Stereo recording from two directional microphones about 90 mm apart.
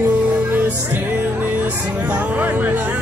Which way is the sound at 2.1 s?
20° right (ahead or behind).